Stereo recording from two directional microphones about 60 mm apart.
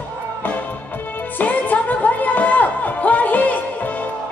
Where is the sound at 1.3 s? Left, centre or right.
Left.